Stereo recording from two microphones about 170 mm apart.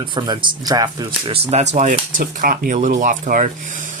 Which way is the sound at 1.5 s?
45° right (ahead or behind).